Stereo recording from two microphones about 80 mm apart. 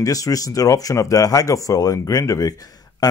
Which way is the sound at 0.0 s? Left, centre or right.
Left.